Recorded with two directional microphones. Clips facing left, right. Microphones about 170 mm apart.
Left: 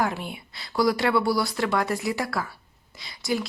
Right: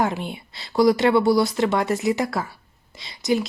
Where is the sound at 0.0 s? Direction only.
25° right (ahead or behind).